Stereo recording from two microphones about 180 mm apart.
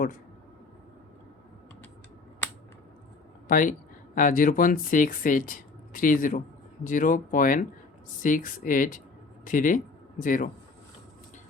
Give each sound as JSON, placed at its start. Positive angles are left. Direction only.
{"t": 3.5, "sound": "speech", "side_deg": 50}